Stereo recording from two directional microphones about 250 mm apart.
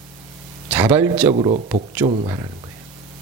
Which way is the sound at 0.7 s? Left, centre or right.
Centre.